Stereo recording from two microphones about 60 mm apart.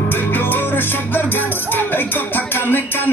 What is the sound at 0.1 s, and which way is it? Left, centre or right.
Music, left.